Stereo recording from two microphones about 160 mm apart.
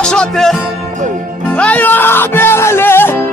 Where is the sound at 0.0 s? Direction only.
5° left (ahead or behind).